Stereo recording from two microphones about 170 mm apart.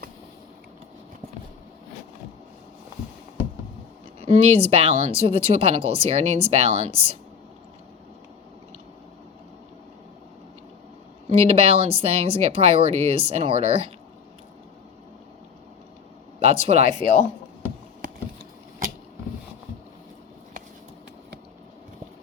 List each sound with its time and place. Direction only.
4.3 s speech: 35° right (ahead or behind)
11.3 s speech: 35° right (ahead or behind)
16.4 s speech: 35° right (ahead or behind)